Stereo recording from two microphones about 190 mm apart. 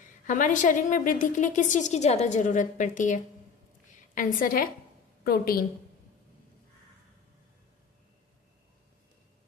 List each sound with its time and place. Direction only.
0.3 s a woman's voice: 45° left (ahead or behind)